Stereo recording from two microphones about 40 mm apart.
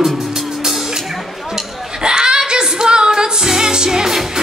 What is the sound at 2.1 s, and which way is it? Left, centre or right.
Music, centre.